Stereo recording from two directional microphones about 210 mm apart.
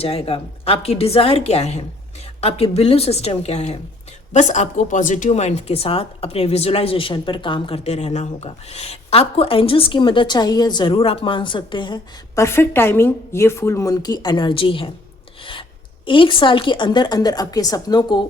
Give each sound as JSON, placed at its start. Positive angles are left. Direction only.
{"t": 0.0, "sound": "a woman's voice", "side_deg": 25}
{"t": 12.4, "sound": "a woman's voice", "side_deg": 10}
{"t": 16.0, "sound": "a woman's voice", "side_deg": 25}